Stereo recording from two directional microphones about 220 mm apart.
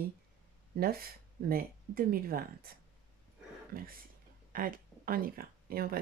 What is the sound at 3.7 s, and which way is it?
Speech, 40° right (ahead or behind).